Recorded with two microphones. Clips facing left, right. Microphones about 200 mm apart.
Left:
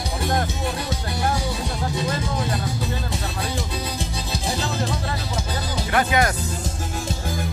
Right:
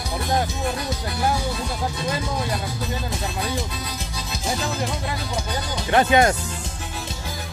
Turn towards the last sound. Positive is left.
turn(degrees=-25)  # may be behind; listen again after turning